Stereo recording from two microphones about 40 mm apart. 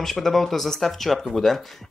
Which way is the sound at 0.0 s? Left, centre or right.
Centre.